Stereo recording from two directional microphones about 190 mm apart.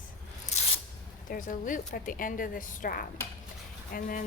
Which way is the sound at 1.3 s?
45° left (ahead or behind).